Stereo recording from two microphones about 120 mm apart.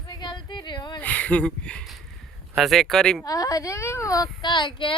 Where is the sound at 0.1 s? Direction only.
40° left (ahead or behind).